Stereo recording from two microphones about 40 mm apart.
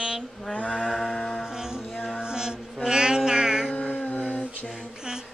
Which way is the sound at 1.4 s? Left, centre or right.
Centre.